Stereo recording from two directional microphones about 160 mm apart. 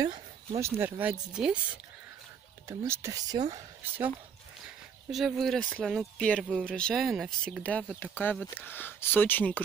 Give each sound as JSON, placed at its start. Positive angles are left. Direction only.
{"t": 0.6, "sound": "speech", "side_deg": -15}
{"t": 2.8, "sound": "speech", "side_deg": -20}
{"t": 4.6, "sound": "speech", "side_deg": 0}